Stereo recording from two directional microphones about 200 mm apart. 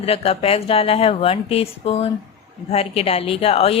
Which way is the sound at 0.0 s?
30° left (ahead or behind).